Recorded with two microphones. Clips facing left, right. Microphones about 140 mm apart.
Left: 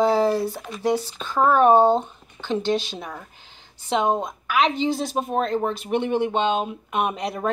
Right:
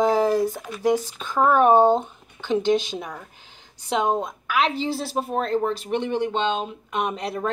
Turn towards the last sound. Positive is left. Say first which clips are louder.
# left 1 dB
turn(degrees=5)  # may be behind; listen again after turning